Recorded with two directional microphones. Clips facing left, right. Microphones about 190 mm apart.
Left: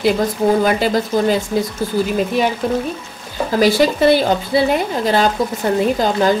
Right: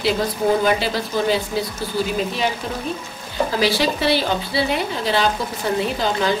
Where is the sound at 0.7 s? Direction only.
45° left (ahead or behind).